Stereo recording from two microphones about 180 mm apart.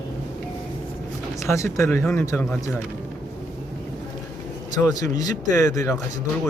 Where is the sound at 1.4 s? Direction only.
15° left (ahead or behind).